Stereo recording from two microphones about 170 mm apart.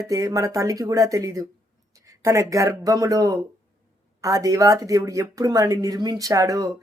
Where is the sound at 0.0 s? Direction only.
20° right (ahead or behind).